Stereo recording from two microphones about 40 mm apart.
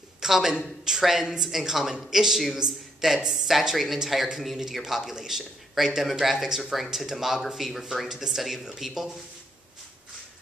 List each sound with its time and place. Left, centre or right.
0.2 s a man's voice: centre
8.1 s a man's voice: centre